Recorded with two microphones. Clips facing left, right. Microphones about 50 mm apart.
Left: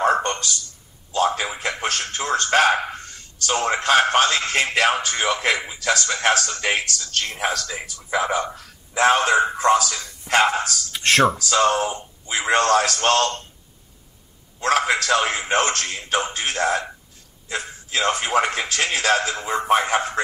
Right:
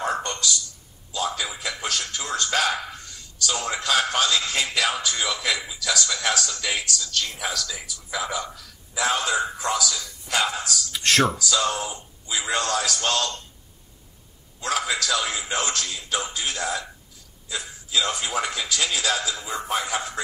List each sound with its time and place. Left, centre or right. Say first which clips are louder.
0.0 s a sound: left 6 dB; left
1.1 s a man's voice: left 7 dB; left
10.9 s speech: left 4 dB; left
11.3 s a man's voice: left 6 dB; left
14.6 s a man's voice: left 6 dB; left